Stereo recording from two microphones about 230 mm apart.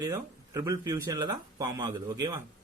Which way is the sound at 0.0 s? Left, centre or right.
Centre.